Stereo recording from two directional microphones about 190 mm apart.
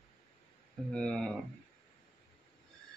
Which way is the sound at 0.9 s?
5° left (ahead or behind).